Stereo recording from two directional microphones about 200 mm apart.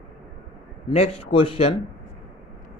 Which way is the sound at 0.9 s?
30° left (ahead or behind).